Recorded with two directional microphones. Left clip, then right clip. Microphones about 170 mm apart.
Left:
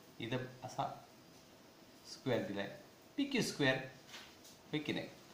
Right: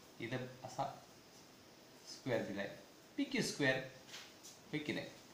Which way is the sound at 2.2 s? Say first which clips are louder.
Left 2 dB; 30° left (ahead or behind).